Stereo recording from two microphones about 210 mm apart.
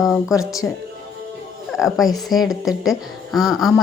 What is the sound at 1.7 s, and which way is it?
A woman's voice, centre (ahead or behind).